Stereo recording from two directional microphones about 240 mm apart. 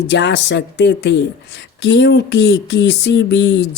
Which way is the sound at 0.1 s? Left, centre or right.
Left.